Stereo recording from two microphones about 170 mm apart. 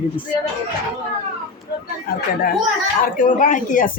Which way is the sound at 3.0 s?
50° left (ahead or behind).